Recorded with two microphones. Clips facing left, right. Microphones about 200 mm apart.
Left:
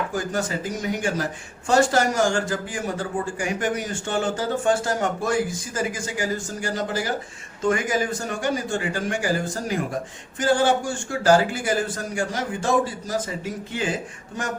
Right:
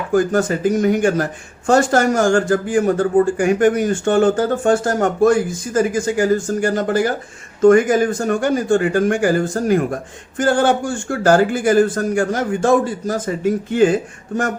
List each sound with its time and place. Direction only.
0.1 s speech: 55° right (ahead or behind)